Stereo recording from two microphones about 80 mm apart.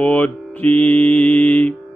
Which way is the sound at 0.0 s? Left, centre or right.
Centre.